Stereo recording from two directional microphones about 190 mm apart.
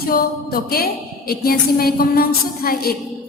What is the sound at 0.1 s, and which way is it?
A woman's voice, 50° left (ahead or behind).